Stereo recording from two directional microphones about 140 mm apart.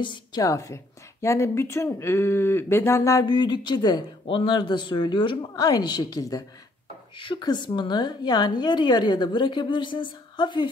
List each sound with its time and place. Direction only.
0.0 s a woman's voice: 35° left (ahead or behind)
0.4 s a woman's voice: 25° left (ahead or behind)